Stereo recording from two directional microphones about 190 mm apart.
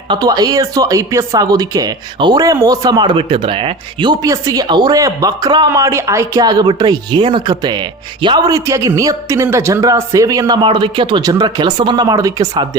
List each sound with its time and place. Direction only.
0.1 s speech: 20° right (ahead or behind)